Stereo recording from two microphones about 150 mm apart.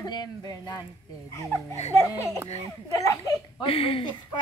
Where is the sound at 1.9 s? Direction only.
20° left (ahead or behind).